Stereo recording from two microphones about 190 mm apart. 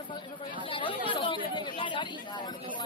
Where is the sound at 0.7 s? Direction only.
25° left (ahead or behind).